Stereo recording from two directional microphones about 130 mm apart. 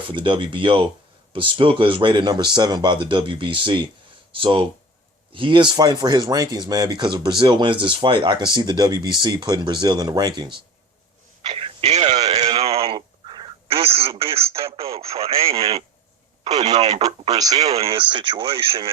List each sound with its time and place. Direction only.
0.1 s speech: 40° right (ahead or behind)
11.5 s radio: 50° right (ahead or behind)
12.2 s speech: 50° right (ahead or behind)
12.5 s a sound: 50° right (ahead or behind)
14.2 s speech: 50° right (ahead or behind)
15.3 s speech: 20° right (ahead or behind)
17.7 s speech: 45° right (ahead or behind)